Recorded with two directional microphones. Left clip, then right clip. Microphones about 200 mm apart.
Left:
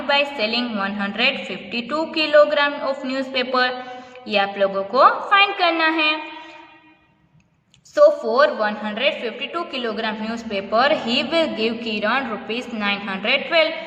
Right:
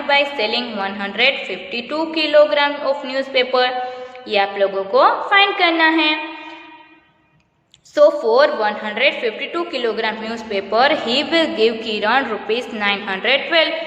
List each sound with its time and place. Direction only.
0.1 s a woman's voice: 15° left (ahead or behind)
7.9 s a woman's voice: 15° left (ahead or behind)